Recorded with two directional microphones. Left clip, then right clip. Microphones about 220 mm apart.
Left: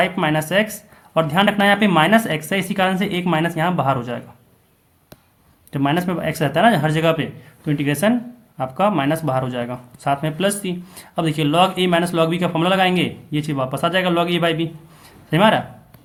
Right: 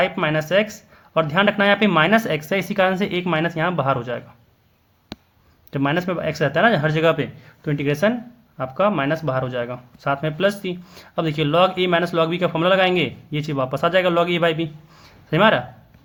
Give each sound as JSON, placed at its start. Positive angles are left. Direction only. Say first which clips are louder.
{"t": 0.0, "sound": "speech", "louder": "left 1 dB", "side_deg": -20}
{"t": 5.7, "sound": "speech", "louder": "left 1 dB", "side_deg": -20}